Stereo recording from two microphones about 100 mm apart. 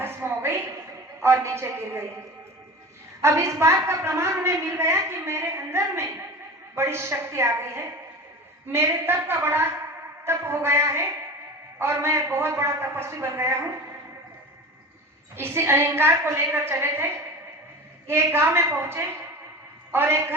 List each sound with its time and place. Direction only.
0.0 s a sound: 25° right (ahead or behind)
1.2 s a woman's voice: 25° right (ahead or behind)
3.2 s a woman's voice: 25° right (ahead or behind)
15.4 s a woman's voice: 25° right (ahead or behind)
18.1 s a woman's voice: 25° right (ahead or behind)